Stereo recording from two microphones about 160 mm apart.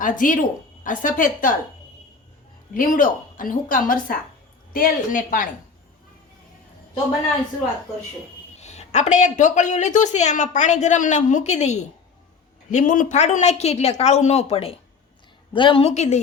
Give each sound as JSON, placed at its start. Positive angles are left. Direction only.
{"t": 0.0, "sound": "a woman's voice", "side_deg": 55}
{"t": 2.7, "sound": "a woman's voice", "side_deg": 60}
{"t": 8.5, "sound": "a woman's voice", "side_deg": 45}